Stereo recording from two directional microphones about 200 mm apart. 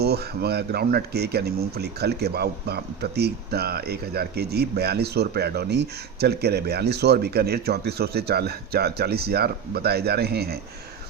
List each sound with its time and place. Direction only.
0.0 s speech: 55° right (ahead or behind)